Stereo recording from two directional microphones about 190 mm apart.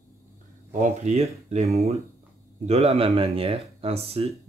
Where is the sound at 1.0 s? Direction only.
35° right (ahead or behind).